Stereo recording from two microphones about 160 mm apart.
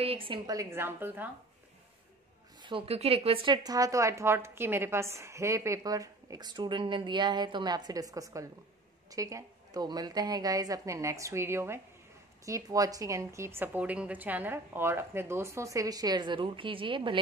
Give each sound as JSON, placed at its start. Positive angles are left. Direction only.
{"t": 0.0, "sound": "a woman's voice", "side_deg": -35}
{"t": 0.5, "sound": "a woman's voice", "side_deg": -20}
{"t": 2.6, "sound": "speech", "side_deg": -35}